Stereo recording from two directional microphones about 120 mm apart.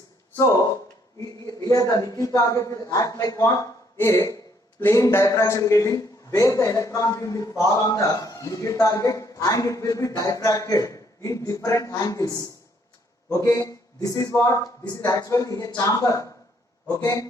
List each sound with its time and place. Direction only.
1.5 s a man's voice: 30° left (ahead or behind)